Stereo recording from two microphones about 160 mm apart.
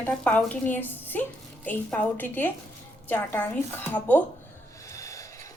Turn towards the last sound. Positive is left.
turn(degrees=20)  # may be behind; listen again after turning